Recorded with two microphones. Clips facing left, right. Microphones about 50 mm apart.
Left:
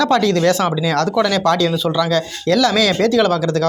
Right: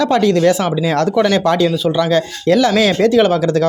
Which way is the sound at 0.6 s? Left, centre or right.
Right.